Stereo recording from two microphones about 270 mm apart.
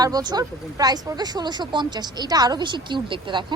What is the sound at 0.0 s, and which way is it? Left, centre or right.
Speech, centre.